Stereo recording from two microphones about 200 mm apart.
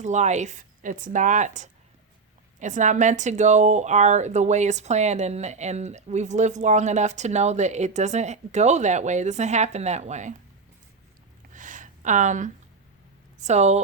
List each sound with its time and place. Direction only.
0.0 s speech: 35° right (ahead or behind)
11.5 s a sound: 40° right (ahead or behind)
13.4 s speech: 35° right (ahead or behind)